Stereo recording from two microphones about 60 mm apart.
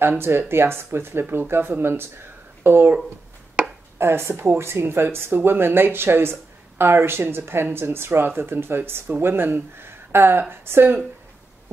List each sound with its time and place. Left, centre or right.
0.2 s speech: right
4.0 s speech: right